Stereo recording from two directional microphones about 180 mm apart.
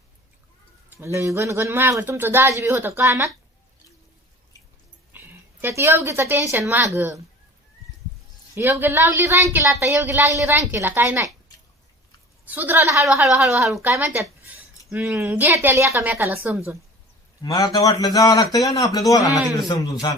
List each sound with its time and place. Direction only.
0.9 s speech: 15° right (ahead or behind)
5.1 s a woman's voice: 10° right (ahead or behind)
8.5 s speech: 15° right (ahead or behind)
12.5 s speech: 10° right (ahead or behind)
13.1 s a woman's voice: 5° right (ahead or behind)
13.9 s a woman's voice: 15° right (ahead or behind)
17.4 s a man's voice: 20° left (ahead or behind)